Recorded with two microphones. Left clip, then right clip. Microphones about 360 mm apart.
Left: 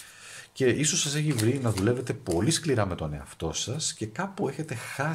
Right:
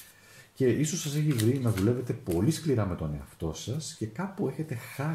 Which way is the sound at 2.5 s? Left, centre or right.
Left.